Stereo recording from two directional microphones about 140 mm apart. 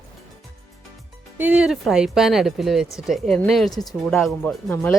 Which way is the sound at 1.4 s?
10° right (ahead or behind).